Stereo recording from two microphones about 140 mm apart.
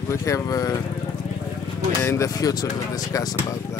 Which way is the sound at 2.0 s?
20° left (ahead or behind).